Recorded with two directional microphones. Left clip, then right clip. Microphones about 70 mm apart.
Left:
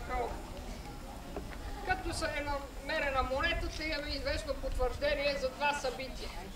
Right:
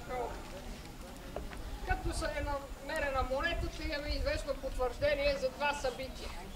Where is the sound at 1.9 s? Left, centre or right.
Left; by 6.0 s centre.